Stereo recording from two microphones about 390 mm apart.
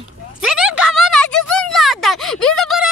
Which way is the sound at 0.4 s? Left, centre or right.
Centre.